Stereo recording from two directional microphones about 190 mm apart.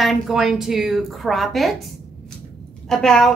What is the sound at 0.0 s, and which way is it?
A woman's voice, centre (ahead or behind).